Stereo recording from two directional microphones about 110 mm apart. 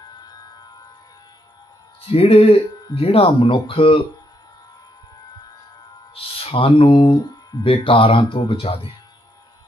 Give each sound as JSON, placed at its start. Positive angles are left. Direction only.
{"t": 0.1, "sound": "music", "side_deg": 40}
{"t": 2.0, "sound": "speech", "side_deg": 60}
{"t": 6.1, "sound": "speech", "side_deg": 60}
{"t": 7.6, "sound": "speech", "side_deg": 55}